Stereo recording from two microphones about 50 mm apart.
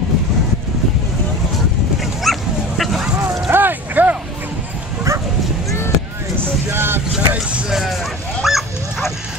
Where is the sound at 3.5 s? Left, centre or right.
Right.